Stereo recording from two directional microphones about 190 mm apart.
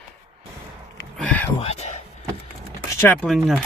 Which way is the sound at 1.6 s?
35° left (ahead or behind).